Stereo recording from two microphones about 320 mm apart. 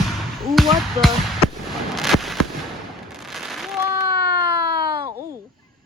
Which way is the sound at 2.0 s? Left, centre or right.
Centre.